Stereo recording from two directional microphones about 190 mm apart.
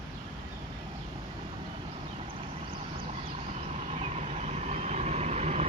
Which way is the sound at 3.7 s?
35° right (ahead or behind).